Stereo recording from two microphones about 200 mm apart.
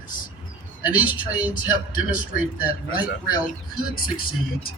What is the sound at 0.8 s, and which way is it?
Speech, 10° right (ahead or behind).